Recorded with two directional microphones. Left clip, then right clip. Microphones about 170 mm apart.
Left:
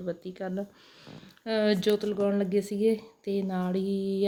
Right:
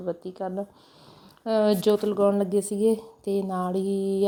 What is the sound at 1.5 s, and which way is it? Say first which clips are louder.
A woman's voice: right 4 dB; 20° right (ahead or behind).